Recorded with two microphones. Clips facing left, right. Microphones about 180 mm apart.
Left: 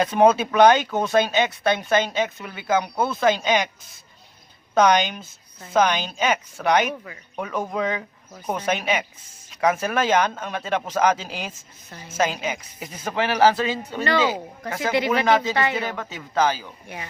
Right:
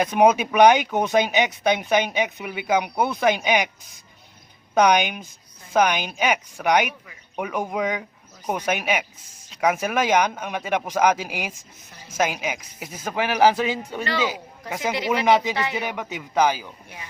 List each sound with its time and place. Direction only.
0.0 s speech: 15° right (ahead or behind)
4.7 s speech: 10° right (ahead or behind)